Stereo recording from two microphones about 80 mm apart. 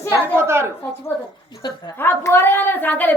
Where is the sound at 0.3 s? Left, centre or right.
Right.